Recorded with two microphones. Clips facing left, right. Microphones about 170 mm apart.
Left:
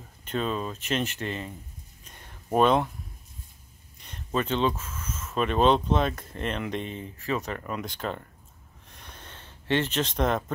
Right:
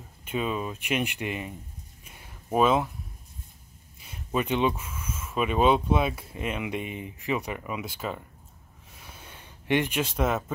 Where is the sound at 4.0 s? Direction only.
5° right (ahead or behind).